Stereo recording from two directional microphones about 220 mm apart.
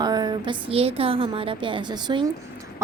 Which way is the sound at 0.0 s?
20° right (ahead or behind).